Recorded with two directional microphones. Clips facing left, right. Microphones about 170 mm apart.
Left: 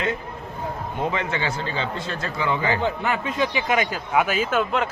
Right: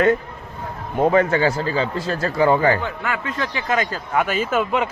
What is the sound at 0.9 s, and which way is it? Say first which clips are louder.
A man's voice: right 11 dB; 45° right (ahead or behind).